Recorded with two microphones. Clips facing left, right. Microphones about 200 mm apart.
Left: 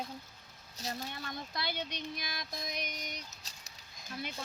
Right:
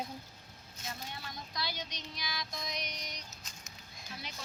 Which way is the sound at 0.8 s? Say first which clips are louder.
Left 5 dB; 35° left (ahead or behind).